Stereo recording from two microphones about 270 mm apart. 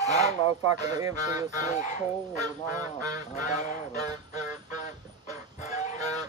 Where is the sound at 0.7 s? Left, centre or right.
Centre.